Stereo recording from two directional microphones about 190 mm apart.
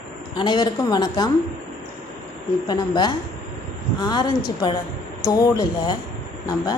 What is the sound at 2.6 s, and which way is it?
A woman's voice, 20° left (ahead or behind).